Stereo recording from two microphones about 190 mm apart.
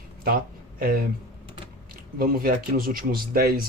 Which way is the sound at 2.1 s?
50° right (ahead or behind).